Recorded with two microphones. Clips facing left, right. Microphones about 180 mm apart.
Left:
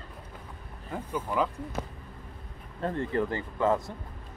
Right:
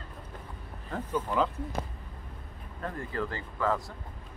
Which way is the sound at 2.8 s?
25° left (ahead or behind).